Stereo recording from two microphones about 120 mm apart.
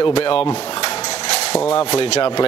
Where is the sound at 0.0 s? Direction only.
50° left (ahead or behind).